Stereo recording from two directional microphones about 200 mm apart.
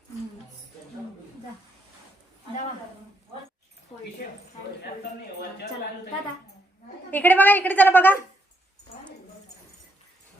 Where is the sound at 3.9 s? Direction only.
30° left (ahead or behind).